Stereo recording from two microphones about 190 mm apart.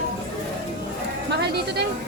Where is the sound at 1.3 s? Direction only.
60° right (ahead or behind).